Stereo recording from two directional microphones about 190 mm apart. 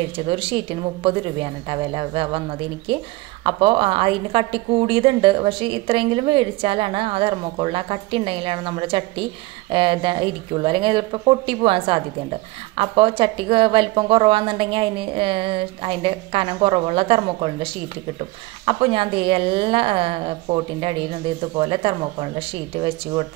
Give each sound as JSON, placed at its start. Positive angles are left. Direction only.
{"t": 0.3, "sound": "a woman's voice", "side_deg": -30}